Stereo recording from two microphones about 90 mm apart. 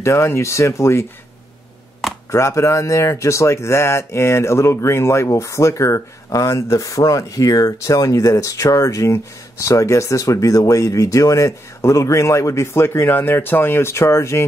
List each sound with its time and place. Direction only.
0.0 s speech: 30° left (ahead or behind)
2.3 s speech: 30° left (ahead or behind)